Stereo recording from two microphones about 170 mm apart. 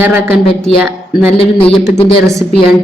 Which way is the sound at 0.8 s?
10° right (ahead or behind).